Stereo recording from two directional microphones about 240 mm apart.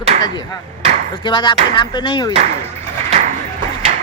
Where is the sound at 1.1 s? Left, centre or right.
Centre.